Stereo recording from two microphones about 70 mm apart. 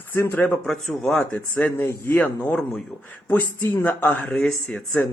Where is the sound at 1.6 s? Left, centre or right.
Left.